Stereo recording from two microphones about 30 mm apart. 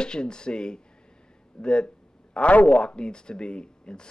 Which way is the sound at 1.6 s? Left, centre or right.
Left.